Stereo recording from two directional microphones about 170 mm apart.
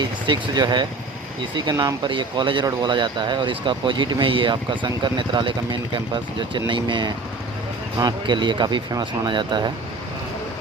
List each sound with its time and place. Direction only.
0.0 s speech: 25° right (ahead or behind)